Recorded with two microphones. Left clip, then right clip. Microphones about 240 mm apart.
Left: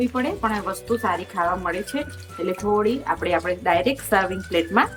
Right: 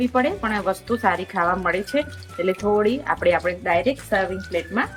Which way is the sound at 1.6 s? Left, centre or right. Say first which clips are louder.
Right 4 dB; centre.